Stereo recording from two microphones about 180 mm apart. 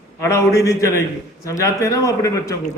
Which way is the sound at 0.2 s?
15° left (ahead or behind).